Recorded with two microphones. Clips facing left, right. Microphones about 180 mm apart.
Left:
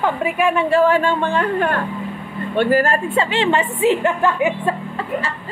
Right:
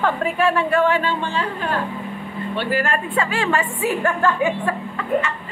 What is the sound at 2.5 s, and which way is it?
Speech, 45° left (ahead or behind).